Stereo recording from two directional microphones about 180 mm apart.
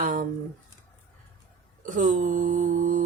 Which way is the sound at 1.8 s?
45° right (ahead or behind).